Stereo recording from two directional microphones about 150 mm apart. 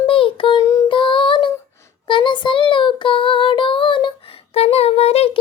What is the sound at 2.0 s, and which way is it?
Child singing, 35° left (ahead or behind).